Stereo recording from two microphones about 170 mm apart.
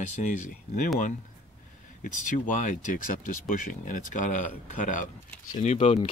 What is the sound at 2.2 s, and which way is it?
Speech, 50° left (ahead or behind).